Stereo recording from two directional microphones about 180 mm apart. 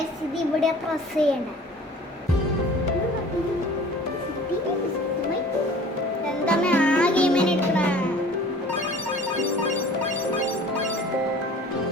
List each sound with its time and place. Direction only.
1.2 s a child's voice: 5° left (ahead or behind)
6.4 s music: 5° left (ahead or behind)